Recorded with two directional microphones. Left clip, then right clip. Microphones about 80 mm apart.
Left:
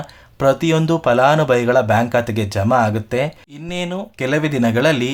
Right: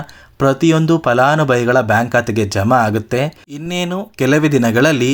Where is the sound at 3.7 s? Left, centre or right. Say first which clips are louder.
Right 3 dB; right.